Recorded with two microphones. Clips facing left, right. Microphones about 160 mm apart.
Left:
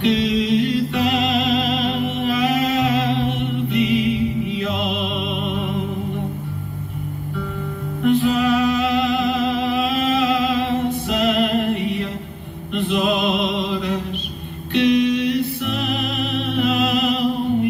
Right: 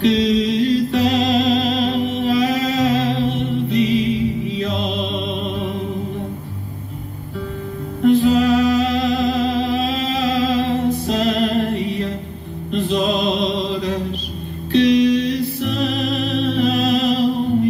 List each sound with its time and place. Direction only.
0.0 s music: 35° right (ahead or behind)
8.0 s music: 35° right (ahead or behind)